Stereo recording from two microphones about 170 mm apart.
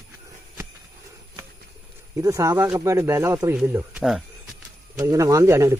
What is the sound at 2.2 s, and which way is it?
Speech, 20° right (ahead or behind).